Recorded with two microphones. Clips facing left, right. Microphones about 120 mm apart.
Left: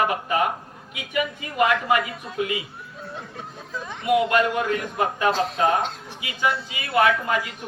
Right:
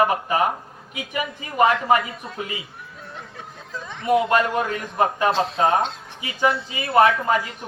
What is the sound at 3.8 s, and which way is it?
Speech, 15° left (ahead or behind).